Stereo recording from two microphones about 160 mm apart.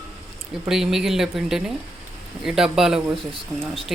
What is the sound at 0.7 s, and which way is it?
Speech, 5° right (ahead or behind).